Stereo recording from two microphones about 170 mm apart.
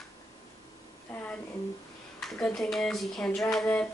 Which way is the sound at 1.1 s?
10° left (ahead or behind).